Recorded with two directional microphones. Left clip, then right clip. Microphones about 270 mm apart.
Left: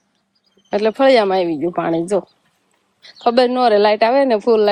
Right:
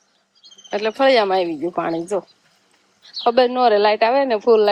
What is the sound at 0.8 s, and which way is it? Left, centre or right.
Speech, left.